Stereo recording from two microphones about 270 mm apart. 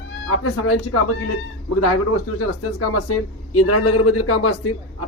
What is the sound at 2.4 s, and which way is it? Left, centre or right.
Speech, left.